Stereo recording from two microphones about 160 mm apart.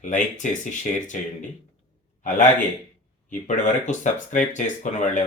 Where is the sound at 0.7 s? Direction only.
50° left (ahead or behind).